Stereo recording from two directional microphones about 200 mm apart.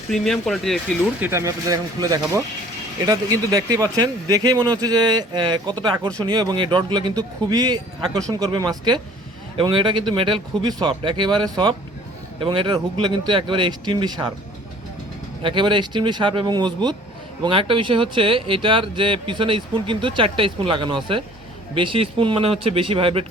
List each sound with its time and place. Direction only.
0.1 s speech: centre (ahead or behind)
1.2 s speech: 15° right (ahead or behind)
15.4 s speech: 25° right (ahead or behind)